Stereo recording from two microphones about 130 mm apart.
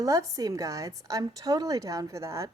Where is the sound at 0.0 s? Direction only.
25° right (ahead or behind).